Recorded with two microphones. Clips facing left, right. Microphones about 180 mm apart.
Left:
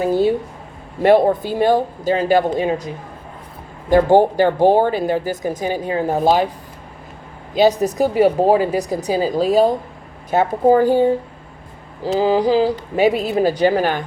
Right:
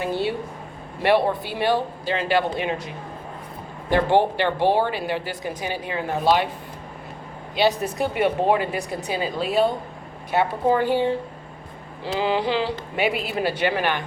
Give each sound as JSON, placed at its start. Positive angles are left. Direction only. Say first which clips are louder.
{"t": 0.0, "sound": "speech", "louder": "left 8 dB", "side_deg": 40}
{"t": 7.5, "sound": "speech", "louder": "left 7 dB", "side_deg": 40}